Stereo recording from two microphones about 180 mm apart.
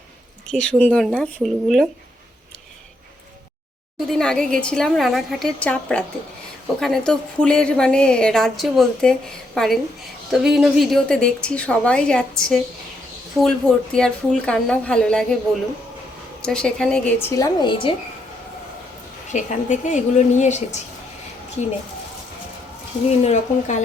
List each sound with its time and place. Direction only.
0.5 s a woman's voice: 5° left (ahead or behind)
4.0 s a woman's voice: 5° left (ahead or behind)
16.4 s speech: 5° left (ahead or behind); by 17.9 s 25° left (ahead or behind)
19.3 s speech: 45° left (ahead or behind)
23.2 s speech: 40° left (ahead or behind)